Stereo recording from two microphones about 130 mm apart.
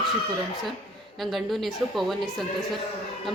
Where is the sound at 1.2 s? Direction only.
Centre (ahead or behind).